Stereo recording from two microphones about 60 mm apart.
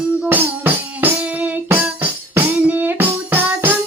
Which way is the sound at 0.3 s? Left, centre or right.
Right.